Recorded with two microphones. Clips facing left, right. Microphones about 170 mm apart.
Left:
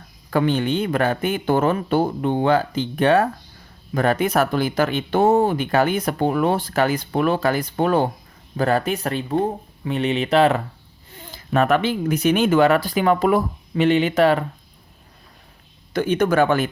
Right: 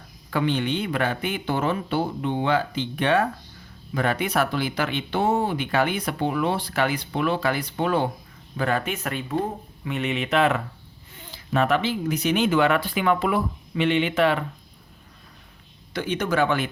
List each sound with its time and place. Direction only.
0.3 s speech: 45° left (ahead or behind)
15.9 s speech: 50° left (ahead or behind)